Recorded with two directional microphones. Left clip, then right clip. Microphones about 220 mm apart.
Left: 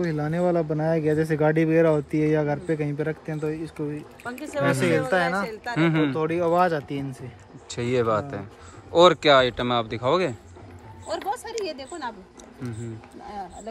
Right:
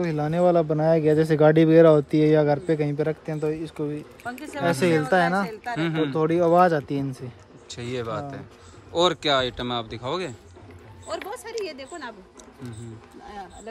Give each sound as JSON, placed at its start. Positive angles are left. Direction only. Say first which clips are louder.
{"t": 0.3, "sound": "speech", "louder": "right 5 dB", "side_deg": -40}
{"t": 5.8, "sound": "speech", "louder": "left 4 dB", "side_deg": -10}
{"t": 6.1, "sound": "speech", "louder": "right 3 dB", "side_deg": -45}
{"t": 7.6, "sound": "speech", "louder": "left 7 dB", "side_deg": -10}
{"t": 11.2, "sound": "a sound", "louder": "left 6 dB", "side_deg": 20}
{"t": 11.6, "sound": "a woman's voice", "louder": "left 2 dB", "side_deg": 15}